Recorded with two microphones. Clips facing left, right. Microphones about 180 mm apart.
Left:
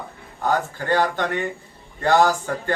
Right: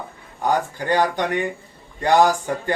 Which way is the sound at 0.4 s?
15° right (ahead or behind).